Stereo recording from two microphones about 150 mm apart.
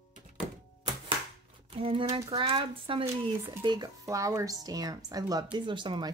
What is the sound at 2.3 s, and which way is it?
Speech, 35° right (ahead or behind).